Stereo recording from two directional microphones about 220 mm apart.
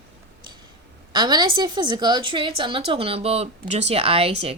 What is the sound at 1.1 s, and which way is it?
A woman's voice, 20° right (ahead or behind).